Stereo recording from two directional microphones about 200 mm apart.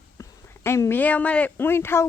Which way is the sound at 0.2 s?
15° left (ahead or behind).